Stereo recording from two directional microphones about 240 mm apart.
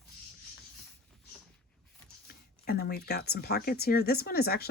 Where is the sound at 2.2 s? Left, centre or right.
Left.